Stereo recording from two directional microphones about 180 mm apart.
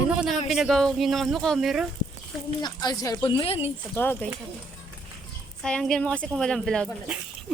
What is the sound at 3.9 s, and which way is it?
Speech, 10° left (ahead or behind).